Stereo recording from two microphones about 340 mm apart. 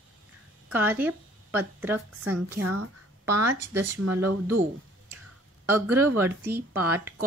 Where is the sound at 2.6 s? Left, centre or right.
Right.